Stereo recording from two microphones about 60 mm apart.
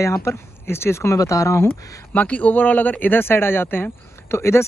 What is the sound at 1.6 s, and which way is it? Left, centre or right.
Speech, left.